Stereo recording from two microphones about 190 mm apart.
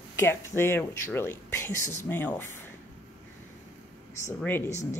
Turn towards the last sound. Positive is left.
turn(degrees=40)  # may be behind; listen again after turning